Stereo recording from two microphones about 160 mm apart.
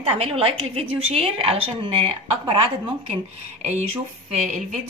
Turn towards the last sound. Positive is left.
turn(degrees=-45)  # may be behind; listen again after turning